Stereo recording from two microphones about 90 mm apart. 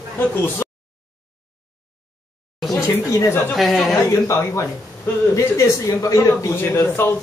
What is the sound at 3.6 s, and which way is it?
Speech, centre (ahead or behind).